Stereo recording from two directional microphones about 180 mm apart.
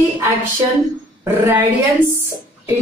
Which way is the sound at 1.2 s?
10° right (ahead or behind).